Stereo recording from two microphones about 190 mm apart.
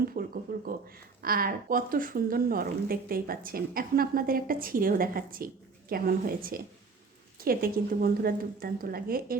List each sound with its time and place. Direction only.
0.1 s speech: 50° right (ahead or behind)